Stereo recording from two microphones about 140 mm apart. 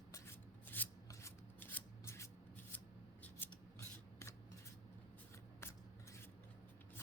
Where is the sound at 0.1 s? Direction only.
15° left (ahead or behind).